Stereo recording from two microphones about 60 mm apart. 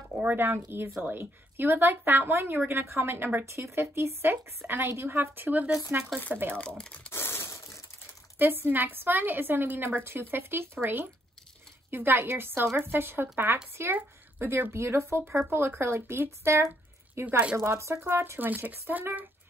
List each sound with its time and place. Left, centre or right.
0.1 s a woman's voice: right
6.8 s speech: centre
7.1 s crushing: left
7.4 s crushing: left
8.4 s a woman's voice: right
14.7 s speech: right
17.9 s a woman's voice: right